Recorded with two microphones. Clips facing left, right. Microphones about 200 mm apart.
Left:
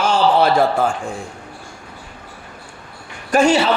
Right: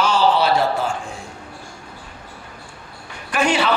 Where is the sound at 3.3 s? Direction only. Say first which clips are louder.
Left 5 dB; 45° left (ahead or behind).